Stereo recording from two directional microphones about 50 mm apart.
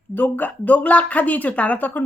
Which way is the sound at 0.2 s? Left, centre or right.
Left.